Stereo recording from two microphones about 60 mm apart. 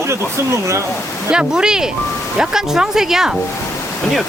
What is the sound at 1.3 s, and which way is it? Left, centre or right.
Speech, centre.